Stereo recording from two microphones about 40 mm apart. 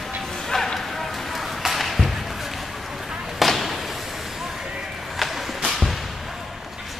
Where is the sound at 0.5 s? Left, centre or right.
Centre.